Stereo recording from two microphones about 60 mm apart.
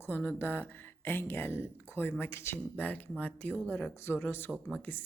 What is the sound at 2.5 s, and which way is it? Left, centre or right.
Speech, left.